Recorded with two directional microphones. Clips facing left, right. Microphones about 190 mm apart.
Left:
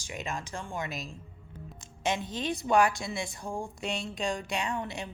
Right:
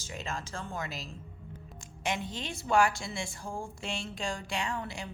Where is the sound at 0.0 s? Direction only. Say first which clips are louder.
Left 2 dB; 15° left (ahead or behind).